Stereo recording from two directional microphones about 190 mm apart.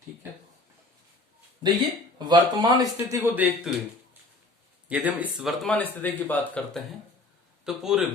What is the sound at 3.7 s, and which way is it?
Speech, centre (ahead or behind).